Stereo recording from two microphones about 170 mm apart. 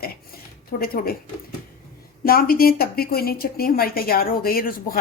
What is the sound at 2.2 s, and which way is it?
Speech, 60° left (ahead or behind).